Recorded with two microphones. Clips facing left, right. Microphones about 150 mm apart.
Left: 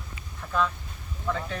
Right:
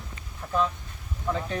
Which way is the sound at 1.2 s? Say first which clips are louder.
Right 1 dB; 25° right (ahead or behind).